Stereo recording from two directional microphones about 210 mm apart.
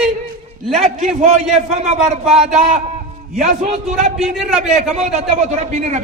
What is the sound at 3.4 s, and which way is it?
Speech, 35° right (ahead or behind).